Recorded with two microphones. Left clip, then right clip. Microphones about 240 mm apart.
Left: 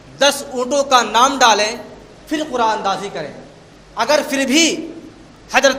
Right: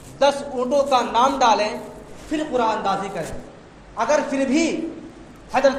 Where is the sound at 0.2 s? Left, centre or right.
Left.